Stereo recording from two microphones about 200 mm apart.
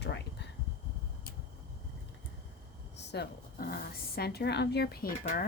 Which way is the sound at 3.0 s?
55° left (ahead or behind).